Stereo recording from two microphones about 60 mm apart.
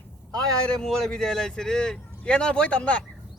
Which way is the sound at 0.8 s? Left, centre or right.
Centre.